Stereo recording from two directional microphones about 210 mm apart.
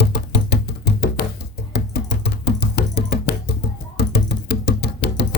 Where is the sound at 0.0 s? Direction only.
50° left (ahead or behind).